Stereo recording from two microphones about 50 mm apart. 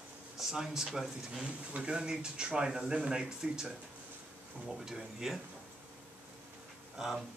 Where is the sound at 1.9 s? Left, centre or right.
Centre.